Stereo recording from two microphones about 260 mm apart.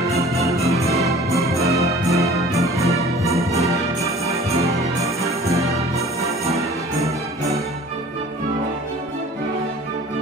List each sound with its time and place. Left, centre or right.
0.9 s music: centre
4.0 s music: centre
5.9 s music: right